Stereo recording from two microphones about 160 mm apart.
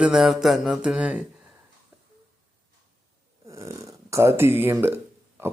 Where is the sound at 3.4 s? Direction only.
20° right (ahead or behind).